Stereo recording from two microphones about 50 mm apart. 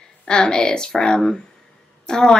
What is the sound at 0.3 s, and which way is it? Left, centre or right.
Speech, centre.